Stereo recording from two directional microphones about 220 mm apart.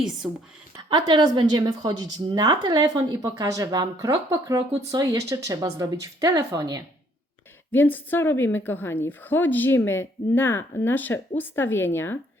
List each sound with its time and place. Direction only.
0.9 s a woman's voice: 20° right (ahead or behind)
7.7 s a woman's voice: 10° left (ahead or behind)